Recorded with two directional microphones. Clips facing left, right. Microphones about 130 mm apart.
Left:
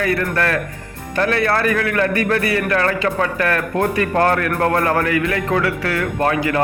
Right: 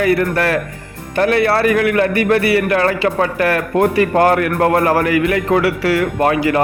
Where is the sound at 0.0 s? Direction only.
25° right (ahead or behind).